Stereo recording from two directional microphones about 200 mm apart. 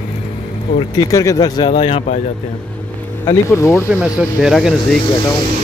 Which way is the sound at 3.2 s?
15° left (ahead or behind).